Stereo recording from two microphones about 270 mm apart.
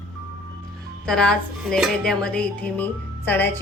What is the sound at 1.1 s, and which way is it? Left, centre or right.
Dishes, centre.